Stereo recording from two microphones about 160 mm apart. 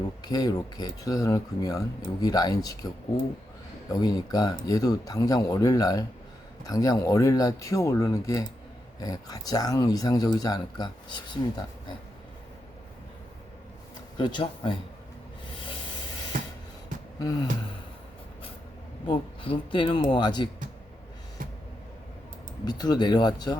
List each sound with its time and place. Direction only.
0.3 s speech: 25° left (ahead or behind)
3.9 s speech: 25° left (ahead or behind)
14.2 s speech: 30° left (ahead or behind)
16.3 s music: 60° right (ahead or behind)
17.2 s speech: 25° left (ahead or behind)
19.0 s speech: 30° left (ahead or behind)
22.6 s speech: 25° left (ahead or behind)